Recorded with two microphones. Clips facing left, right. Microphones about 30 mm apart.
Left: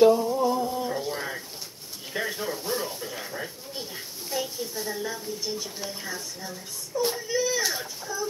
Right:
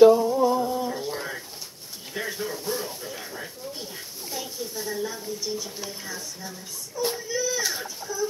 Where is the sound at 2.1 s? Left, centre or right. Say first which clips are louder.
Left 2 dB; left.